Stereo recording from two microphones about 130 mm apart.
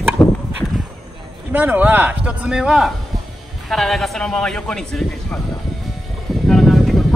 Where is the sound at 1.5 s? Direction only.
15° right (ahead or behind); by 5.4 s 5° left (ahead or behind).